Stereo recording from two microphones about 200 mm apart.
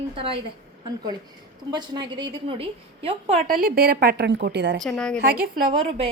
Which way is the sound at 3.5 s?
45° right (ahead or behind).